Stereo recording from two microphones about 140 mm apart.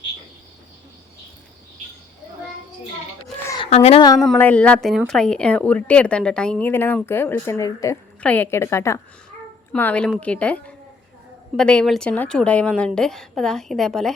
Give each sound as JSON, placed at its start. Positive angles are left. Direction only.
{"t": 3.7, "sound": "a woman's voice", "side_deg": 45}
{"t": 4.4, "sound": "a woman's voice", "side_deg": 10}
{"t": 8.2, "sound": "a woman's voice", "side_deg": 10}